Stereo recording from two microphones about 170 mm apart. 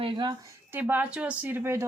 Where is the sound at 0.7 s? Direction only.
10° right (ahead or behind).